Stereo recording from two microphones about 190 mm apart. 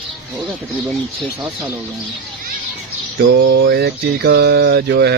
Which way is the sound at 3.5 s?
60° right (ahead or behind).